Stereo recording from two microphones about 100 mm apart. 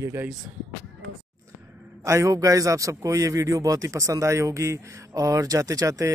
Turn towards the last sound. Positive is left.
turn(degrees=-35)  # may be behind; listen again after turning